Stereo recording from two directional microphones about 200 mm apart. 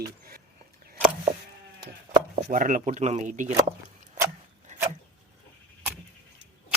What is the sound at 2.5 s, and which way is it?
Speech, 45° right (ahead or behind).